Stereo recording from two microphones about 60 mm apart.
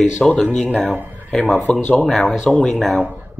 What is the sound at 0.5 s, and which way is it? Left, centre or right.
Speech, centre.